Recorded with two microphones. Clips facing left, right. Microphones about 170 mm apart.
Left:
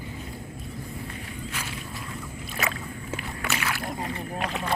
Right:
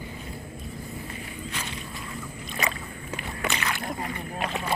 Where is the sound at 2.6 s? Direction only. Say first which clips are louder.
Even; centre (ahead or behind).